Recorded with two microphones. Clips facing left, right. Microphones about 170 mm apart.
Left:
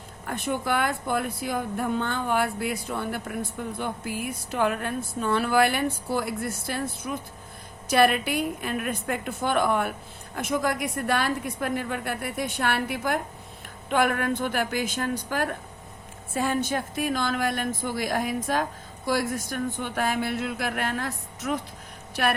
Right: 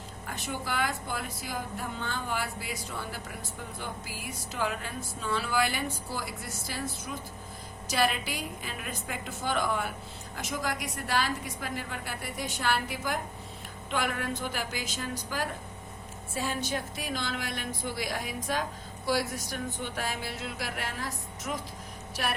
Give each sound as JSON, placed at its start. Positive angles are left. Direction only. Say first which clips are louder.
{"t": 0.3, "sound": "a woman's voice", "louder": "left 8 dB", "side_deg": 55}